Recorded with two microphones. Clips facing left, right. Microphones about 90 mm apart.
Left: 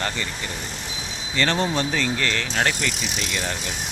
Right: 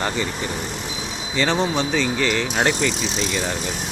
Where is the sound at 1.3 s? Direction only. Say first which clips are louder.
Right 2 dB; 10° right (ahead or behind).